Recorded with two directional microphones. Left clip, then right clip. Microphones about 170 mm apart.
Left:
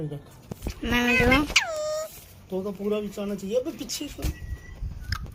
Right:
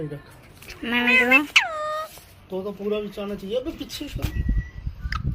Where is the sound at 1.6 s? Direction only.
10° left (ahead or behind).